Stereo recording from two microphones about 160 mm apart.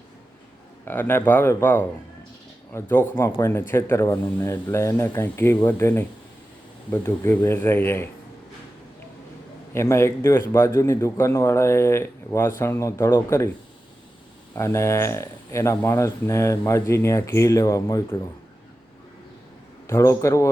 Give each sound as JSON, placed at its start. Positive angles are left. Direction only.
{"t": 0.9, "sound": "speech", "side_deg": 15}
{"t": 9.7, "sound": "speech", "side_deg": 15}
{"t": 14.5, "sound": "speech", "side_deg": 20}
{"t": 19.9, "sound": "a man's voice", "side_deg": 20}